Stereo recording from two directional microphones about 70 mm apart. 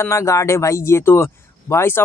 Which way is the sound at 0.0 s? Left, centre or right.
Left.